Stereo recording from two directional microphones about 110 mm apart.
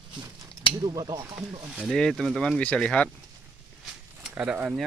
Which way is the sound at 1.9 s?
5° left (ahead or behind).